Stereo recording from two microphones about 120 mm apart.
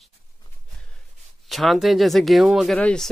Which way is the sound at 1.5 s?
Centre (ahead or behind).